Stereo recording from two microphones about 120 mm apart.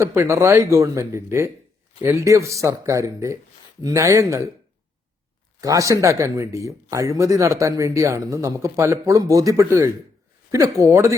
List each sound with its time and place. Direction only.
0.0 s speech: 25° right (ahead or behind)
5.5 s speech: 30° right (ahead or behind)